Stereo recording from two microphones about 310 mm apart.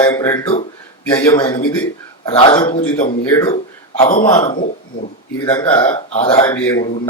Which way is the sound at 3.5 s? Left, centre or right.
Centre.